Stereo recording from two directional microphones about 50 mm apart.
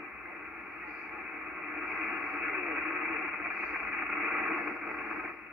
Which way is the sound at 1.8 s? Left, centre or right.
Centre.